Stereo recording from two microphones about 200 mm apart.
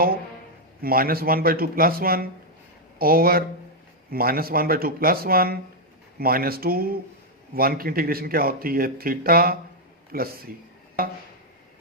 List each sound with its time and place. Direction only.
0.8 s speech: 50° right (ahead or behind)